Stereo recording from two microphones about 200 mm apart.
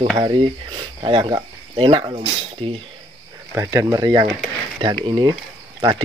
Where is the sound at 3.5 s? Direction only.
15° right (ahead or behind).